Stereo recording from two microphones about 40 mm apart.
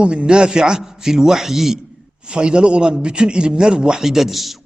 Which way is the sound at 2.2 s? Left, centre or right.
Right.